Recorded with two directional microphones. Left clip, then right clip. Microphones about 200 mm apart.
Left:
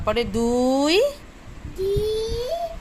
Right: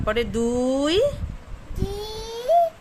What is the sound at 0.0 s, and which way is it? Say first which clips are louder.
A woman's voice: left 1 dB; 20° right (ahead or behind).